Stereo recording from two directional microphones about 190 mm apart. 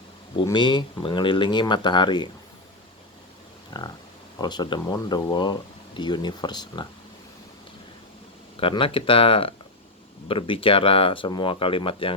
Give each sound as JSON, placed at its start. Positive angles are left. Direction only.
{"t": 0.4, "sound": "speech", "side_deg": 25}
{"t": 3.7, "sound": "a sound", "side_deg": 20}
{"t": 4.4, "sound": "speech", "side_deg": 20}
{"t": 8.6, "sound": "speech", "side_deg": 30}